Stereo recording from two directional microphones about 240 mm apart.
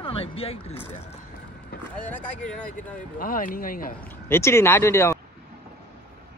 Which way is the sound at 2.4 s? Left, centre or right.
Centre.